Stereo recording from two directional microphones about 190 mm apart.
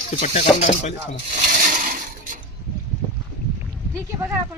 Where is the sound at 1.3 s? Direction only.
40° right (ahead or behind).